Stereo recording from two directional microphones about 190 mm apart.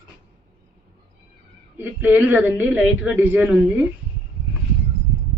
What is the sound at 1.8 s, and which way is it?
Speech, 10° right (ahead or behind).